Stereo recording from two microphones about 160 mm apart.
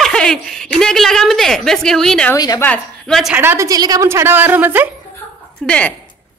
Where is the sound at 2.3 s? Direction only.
25° left (ahead or behind).